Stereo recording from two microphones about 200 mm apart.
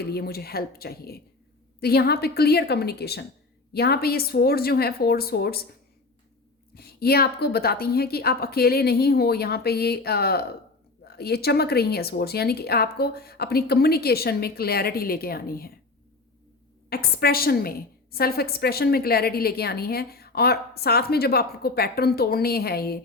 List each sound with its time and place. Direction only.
0.0 s a woman's voice: 50° left (ahead or behind)
6.7 s a woman's voice: 50° left (ahead or behind)
16.9 s a woman's voice: 50° left (ahead or behind)